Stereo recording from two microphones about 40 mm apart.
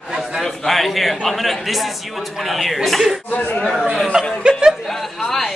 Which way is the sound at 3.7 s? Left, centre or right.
Centre.